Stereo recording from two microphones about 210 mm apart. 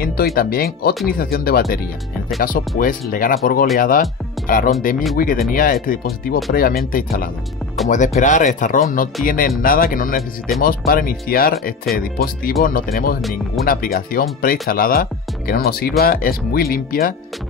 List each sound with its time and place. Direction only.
0.0 s speech: 45° left (ahead or behind)